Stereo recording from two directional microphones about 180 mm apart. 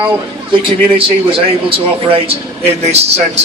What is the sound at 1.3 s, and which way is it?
A man's voice, 30° right (ahead or behind).